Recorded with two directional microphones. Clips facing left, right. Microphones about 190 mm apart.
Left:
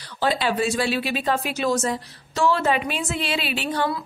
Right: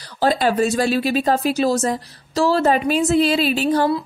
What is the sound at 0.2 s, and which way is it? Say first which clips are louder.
A woman's voice: right 5 dB; 40° right (ahead or behind).